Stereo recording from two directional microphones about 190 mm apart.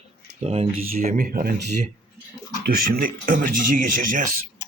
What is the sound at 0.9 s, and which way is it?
Speech, 45° right (ahead or behind).